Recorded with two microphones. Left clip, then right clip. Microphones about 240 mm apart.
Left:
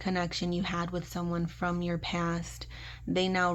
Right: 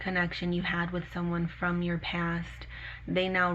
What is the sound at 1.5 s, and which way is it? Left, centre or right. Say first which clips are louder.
Speech: right 1 dB; left.